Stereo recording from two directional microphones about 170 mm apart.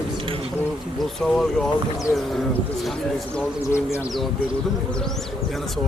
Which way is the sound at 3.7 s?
15° left (ahead or behind).